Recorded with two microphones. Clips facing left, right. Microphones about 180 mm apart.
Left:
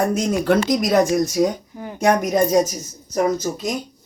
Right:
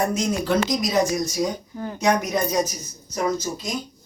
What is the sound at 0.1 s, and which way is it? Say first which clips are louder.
Speech: left 4 dB; 55° left (ahead or behind).